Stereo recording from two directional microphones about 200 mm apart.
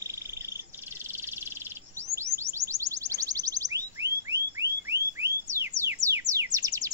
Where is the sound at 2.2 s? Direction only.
15° right (ahead or behind).